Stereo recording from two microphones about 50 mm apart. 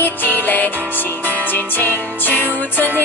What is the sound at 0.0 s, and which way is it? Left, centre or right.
Music, left.